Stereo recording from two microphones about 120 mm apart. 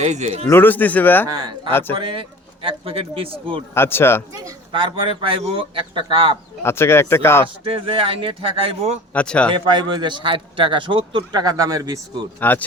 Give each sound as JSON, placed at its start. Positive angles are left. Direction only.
{"t": 0.0, "sound": "speech", "side_deg": -70}
{"t": 0.4, "sound": "speech", "side_deg": 20}
{"t": 1.3, "sound": "a man's voice", "side_deg": -35}
{"t": 3.8, "sound": "speech", "side_deg": 20}
{"t": 4.7, "sound": "a man's voice", "side_deg": -45}
{"t": 6.6, "sound": "speech", "side_deg": 20}
{"t": 7.6, "sound": "a man's voice", "side_deg": -50}
{"t": 9.1, "sound": "speech", "side_deg": 10}
{"t": 9.6, "sound": "a man's voice", "side_deg": -40}
{"t": 12.4, "sound": "speech", "side_deg": 15}